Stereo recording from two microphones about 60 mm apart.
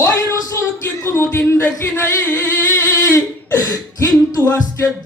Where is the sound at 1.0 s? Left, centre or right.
Left.